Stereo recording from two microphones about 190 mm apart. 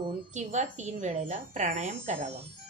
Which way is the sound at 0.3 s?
40° right (ahead or behind).